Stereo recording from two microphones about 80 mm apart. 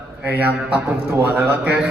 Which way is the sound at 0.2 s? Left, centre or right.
Right.